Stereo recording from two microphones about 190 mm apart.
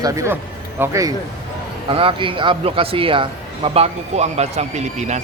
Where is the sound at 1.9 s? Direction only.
30° right (ahead or behind).